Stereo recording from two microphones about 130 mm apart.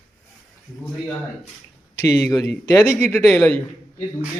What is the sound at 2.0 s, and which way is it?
Speech, 25° left (ahead or behind).